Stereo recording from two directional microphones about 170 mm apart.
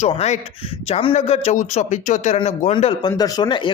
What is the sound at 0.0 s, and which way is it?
Speech, 40° left (ahead or behind).